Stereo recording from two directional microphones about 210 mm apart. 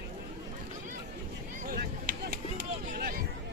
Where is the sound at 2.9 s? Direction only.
45° right (ahead or behind).